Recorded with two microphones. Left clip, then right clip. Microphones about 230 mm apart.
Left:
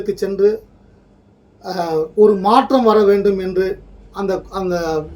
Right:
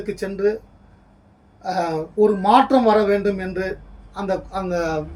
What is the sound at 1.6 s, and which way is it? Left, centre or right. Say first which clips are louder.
Speech: left 3 dB; centre.